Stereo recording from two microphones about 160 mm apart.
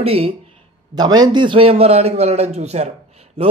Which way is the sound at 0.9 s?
25° right (ahead or behind).